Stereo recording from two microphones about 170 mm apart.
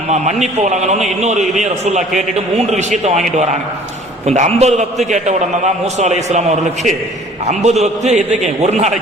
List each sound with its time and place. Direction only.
0.1 s a man's voice: 45° right (ahead or behind)
4.3 s a man's voice: 40° right (ahead or behind)
7.4 s a man's voice: 40° right (ahead or behind)